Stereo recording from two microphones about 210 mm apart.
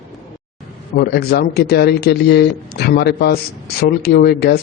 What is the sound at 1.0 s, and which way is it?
Speech, 50° left (ahead or behind).